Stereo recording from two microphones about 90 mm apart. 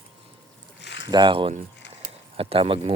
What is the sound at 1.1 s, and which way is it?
Speech, 55° right (ahead or behind).